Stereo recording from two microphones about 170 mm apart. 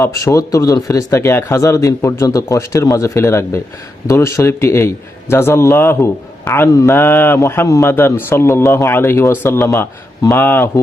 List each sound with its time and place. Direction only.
0.0 s a man's voice: 15° left (ahead or behind)